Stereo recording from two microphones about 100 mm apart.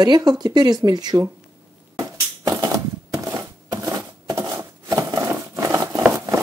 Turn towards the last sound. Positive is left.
turn(degrees=-25)  # may be behind; listen again after turning